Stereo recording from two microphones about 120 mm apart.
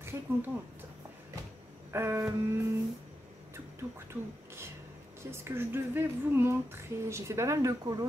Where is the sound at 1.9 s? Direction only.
20° right (ahead or behind).